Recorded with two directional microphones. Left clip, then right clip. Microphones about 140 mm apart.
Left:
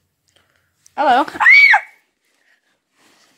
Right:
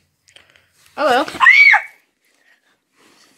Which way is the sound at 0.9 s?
60° left (ahead or behind).